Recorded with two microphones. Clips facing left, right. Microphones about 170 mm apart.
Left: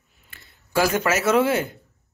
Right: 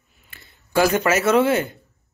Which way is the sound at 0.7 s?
5° left (ahead or behind).